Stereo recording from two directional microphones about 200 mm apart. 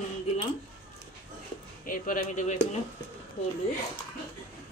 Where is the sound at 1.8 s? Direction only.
45° left (ahead or behind).